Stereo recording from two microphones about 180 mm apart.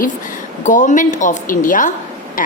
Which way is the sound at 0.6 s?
45° left (ahead or behind).